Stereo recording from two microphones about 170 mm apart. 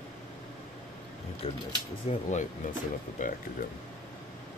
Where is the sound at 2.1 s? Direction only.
45° left (ahead or behind).